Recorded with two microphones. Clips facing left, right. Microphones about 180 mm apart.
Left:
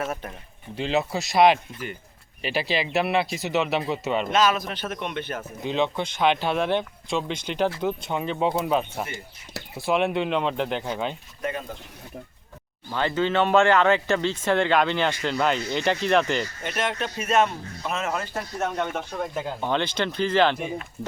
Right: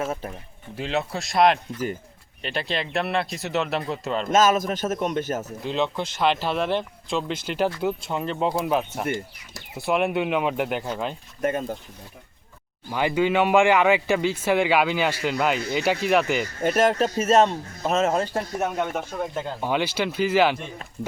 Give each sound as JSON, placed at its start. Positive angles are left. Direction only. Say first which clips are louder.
{"t": 0.8, "sound": "speech", "louder": "left 2 dB", "side_deg": 0}
{"t": 4.3, "sound": "a man's voice", "louder": "right 5 dB", "side_deg": -45}
{"t": 5.6, "sound": "speech", "louder": "left 2 dB", "side_deg": 0}
{"t": 12.9, "sound": "speech", "louder": "right 2 dB", "side_deg": -10}
{"t": 16.6, "sound": "speech", "louder": "right 8 dB", "side_deg": -45}
{"t": 18.6, "sound": "speech", "louder": "left 1 dB", "side_deg": -5}